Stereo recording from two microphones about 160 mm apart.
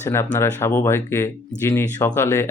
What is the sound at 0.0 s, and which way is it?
Speech, 15° left (ahead or behind).